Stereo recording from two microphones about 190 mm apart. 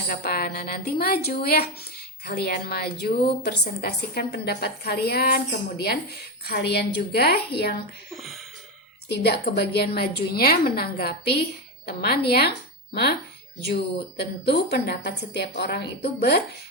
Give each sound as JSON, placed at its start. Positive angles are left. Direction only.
{"t": 0.1, "sound": "a woman's voice", "side_deg": 55}
{"t": 8.1, "sound": "speech", "side_deg": 0}
{"t": 9.0, "sound": "a woman's voice", "side_deg": 60}
{"t": 14.2, "sound": "a woman's voice", "side_deg": 60}